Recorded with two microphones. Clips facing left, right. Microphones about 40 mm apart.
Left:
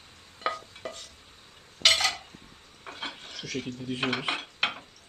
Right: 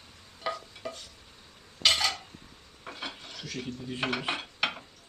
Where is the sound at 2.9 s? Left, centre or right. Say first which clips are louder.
Left 1 dB; left.